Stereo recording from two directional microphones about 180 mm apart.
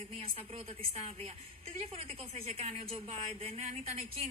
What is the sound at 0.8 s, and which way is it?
Speech, 30° right (ahead or behind).